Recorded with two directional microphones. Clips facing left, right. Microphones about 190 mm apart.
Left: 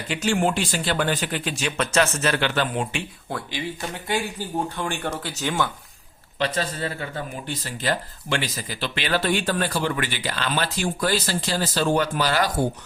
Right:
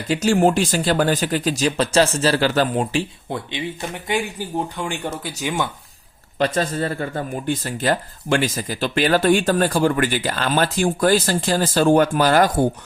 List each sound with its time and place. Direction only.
0.1 s speech: 40° right (ahead or behind)
3.2 s speech: 20° right (ahead or behind)
6.4 s speech: 45° right (ahead or behind)